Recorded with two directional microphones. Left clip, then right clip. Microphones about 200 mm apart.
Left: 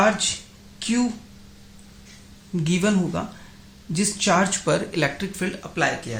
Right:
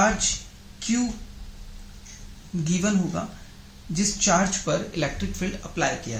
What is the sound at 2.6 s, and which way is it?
Speech, 40° left (ahead or behind).